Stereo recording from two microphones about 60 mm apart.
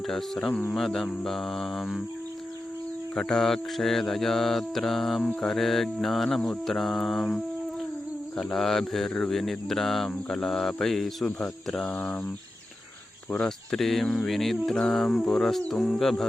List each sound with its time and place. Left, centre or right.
0.1 s speech: centre
0.7 s mantra: centre
3.2 s mantra: centre
11.3 s speech: centre
13.4 s mantra: centre